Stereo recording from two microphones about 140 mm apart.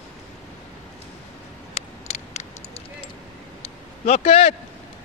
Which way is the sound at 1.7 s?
50° left (ahead or behind).